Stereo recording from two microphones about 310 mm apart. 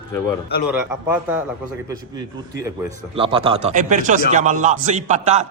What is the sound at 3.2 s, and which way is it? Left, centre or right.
A man's voice, centre.